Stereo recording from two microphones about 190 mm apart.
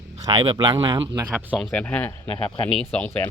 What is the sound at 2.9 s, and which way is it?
Speech, 10° left (ahead or behind).